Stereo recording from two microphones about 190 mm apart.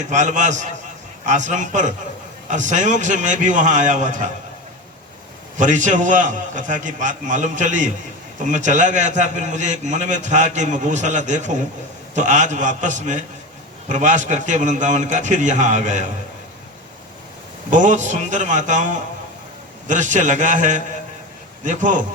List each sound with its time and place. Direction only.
0.1 s a man's voice: 40° right (ahead or behind)
5.5 s a man's voice: 40° right (ahead or behind)
17.7 s a man's voice: 40° right (ahead or behind)